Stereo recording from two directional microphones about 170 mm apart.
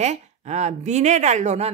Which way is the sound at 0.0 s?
40° right (ahead or behind).